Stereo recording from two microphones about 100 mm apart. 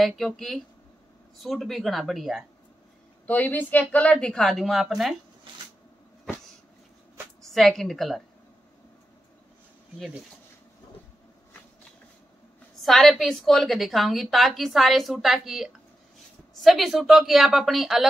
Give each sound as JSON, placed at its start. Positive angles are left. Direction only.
{"t": 0.0, "sound": "a woman's voice", "side_deg": 0}
{"t": 3.3, "sound": "a woman's voice", "side_deg": 15}
{"t": 7.4, "sound": "a woman's voice", "side_deg": 5}
{"t": 12.8, "sound": "a woman's voice", "side_deg": 0}